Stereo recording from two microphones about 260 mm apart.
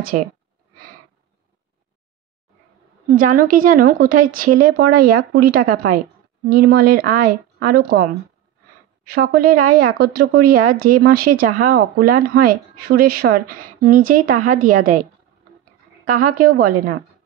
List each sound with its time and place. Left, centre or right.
0.1 s speech: right
3.1 s speech: right
16.1 s speech: right